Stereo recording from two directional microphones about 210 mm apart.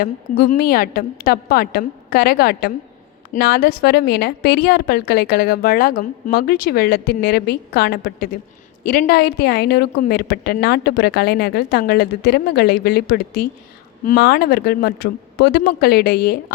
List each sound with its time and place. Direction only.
0.0 s a woman's voice: 45° left (ahead or behind)